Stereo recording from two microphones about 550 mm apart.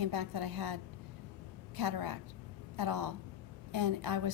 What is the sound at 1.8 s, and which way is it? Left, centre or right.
A woman's voice, right.